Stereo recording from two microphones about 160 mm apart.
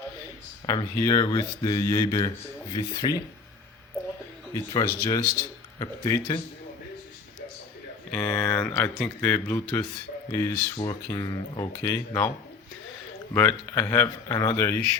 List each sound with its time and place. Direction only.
0.7 s speech: 20° left (ahead or behind)
4.5 s speech: 25° left (ahead or behind)
8.1 s speech: 10° left (ahead or behind)
11.7 s speech: 15° left (ahead or behind)
13.3 s speech: 15° left (ahead or behind)